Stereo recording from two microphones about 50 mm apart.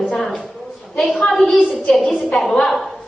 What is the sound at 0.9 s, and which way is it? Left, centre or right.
A woman's voice, centre.